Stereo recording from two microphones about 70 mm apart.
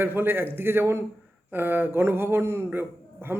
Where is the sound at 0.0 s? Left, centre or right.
Right.